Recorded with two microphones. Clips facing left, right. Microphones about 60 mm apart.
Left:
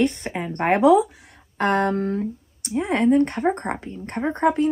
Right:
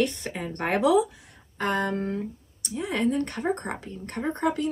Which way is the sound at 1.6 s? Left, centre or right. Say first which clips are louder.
Left 6 dB; left.